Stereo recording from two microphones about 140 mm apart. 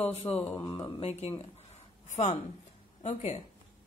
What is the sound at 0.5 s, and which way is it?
Speech, 30° left (ahead or behind).